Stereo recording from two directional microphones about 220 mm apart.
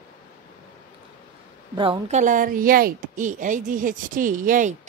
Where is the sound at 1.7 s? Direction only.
25° right (ahead or behind).